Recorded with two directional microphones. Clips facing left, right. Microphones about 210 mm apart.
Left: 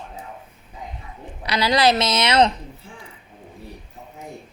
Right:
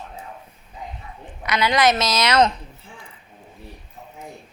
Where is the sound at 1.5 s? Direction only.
35° left (ahead or behind).